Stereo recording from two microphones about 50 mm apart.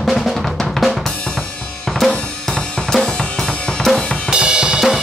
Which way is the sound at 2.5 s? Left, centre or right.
Centre.